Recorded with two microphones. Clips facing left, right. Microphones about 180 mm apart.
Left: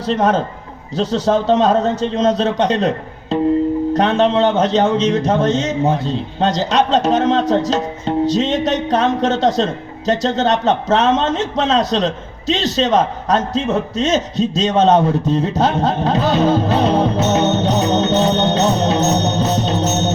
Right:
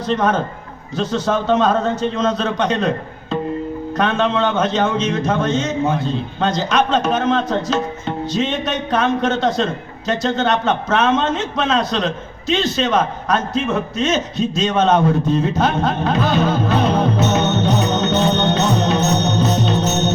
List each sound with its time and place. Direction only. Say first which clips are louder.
0.0 s a man's voice: left 2 dB; 35° left (ahead or behind)